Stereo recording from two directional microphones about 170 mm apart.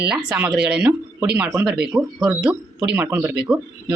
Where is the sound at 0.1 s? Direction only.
5° right (ahead or behind).